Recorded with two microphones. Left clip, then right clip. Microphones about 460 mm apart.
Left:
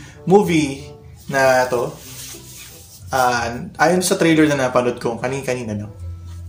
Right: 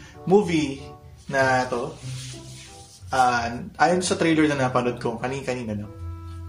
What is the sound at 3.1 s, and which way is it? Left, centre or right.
Speech, right.